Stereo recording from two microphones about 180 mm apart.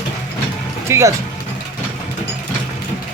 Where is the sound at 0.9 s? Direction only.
15° right (ahead or behind).